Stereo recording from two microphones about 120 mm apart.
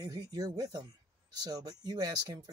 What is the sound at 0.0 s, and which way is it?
Speech, 30° right (ahead or behind).